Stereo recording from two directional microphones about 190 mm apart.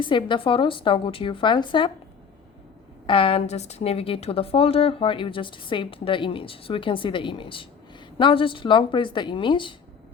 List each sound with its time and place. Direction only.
0.0 s a woman's voice: 25° left (ahead or behind)
3.1 s a woman's voice: 30° left (ahead or behind)